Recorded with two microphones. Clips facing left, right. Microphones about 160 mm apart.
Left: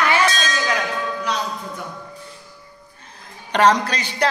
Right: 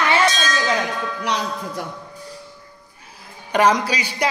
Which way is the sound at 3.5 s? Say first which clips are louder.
Even; 10° right (ahead or behind).